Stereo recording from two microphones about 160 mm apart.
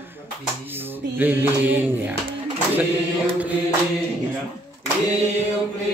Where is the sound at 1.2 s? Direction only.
10° right (ahead or behind).